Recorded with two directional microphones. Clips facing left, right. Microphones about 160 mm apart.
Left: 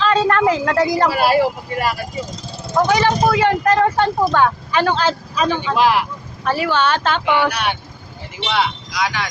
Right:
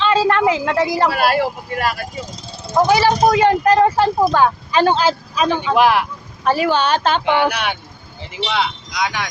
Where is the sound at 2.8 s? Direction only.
20° right (ahead or behind).